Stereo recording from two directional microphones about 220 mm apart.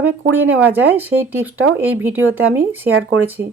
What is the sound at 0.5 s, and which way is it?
Speech, 10° right (ahead or behind).